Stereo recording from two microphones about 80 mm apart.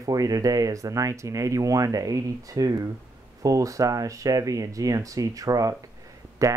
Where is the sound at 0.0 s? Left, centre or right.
Right.